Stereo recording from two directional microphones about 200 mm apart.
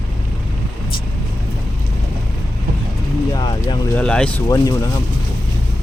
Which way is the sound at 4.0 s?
5° left (ahead or behind).